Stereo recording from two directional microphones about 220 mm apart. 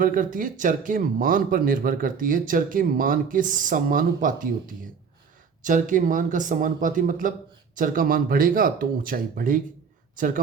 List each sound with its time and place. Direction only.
0.0 s speech: 40° right (ahead or behind)